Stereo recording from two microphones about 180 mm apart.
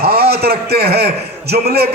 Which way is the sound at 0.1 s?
60° right (ahead or behind).